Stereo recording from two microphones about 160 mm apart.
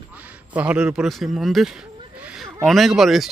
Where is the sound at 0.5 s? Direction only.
10° right (ahead or behind).